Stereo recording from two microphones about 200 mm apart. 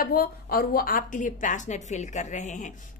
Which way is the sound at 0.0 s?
45° left (ahead or behind).